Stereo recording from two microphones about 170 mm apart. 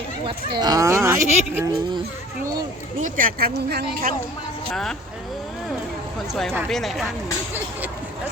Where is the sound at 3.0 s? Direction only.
55° right (ahead or behind); by 4.1 s 70° right (ahead or behind).